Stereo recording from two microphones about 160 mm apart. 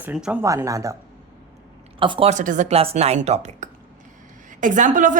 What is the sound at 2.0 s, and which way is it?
Speech, 30° right (ahead or behind).